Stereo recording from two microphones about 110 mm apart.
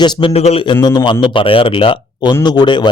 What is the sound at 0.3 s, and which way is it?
Speech, 65° left (ahead or behind).